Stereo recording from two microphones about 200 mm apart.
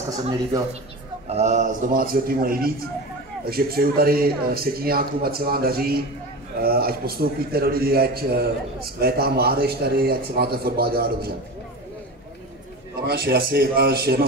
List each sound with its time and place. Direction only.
1.2 s a man's voice: 35° right (ahead or behind); by 11.3 s 50° right (ahead or behind)
13.0 s a man's voice: 50° right (ahead or behind)